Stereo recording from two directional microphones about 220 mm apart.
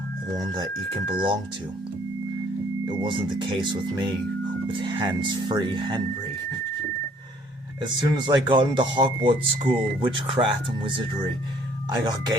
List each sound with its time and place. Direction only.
2.8 s speech: 20° right (ahead or behind)
7.8 s speech: 20° right (ahead or behind)